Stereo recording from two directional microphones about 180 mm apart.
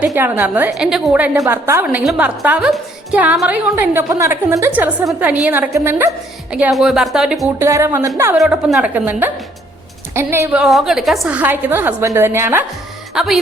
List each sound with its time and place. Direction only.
0.0 s a woman's voice: 10° right (ahead or behind)
7.6 s a woman's voice: 15° right (ahead or behind)
8.4 s a woman's voice: 5° right (ahead or behind)
10.6 s a woman's voice: centre (ahead or behind)
13.1 s speech: centre (ahead or behind)